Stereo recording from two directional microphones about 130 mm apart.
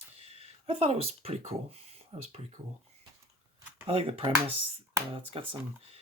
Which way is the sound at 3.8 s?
45° right (ahead or behind).